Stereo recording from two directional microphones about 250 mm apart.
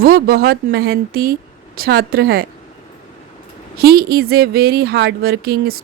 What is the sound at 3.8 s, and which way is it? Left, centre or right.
Speech, right.